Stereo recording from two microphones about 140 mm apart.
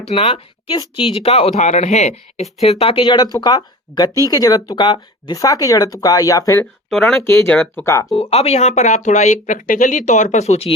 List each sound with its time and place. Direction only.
0.1 s speech: 40° left (ahead or behind); by 6.7 s 20° left (ahead or behind)
6.9 s speech: centre (ahead or behind)
7.2 s speech: 15° left (ahead or behind)
8.1 s speech: 45° left (ahead or behind); by 10.0 s 70° left (ahead or behind)
10.1 s speech: 60° left (ahead or behind)